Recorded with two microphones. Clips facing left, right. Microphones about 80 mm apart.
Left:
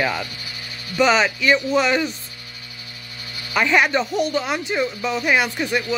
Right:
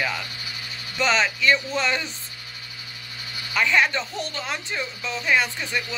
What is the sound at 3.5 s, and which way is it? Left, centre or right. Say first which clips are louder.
Speech: left 4 dB; centre.